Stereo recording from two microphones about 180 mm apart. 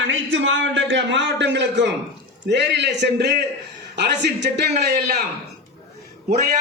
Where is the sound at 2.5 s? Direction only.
70° right (ahead or behind).